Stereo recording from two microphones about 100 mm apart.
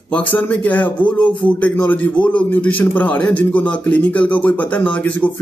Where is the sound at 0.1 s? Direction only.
15° left (ahead or behind).